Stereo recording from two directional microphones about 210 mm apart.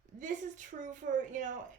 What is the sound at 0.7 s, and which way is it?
Speech, 35° right (ahead or behind).